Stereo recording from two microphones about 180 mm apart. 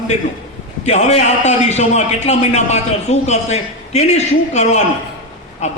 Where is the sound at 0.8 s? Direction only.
40° left (ahead or behind).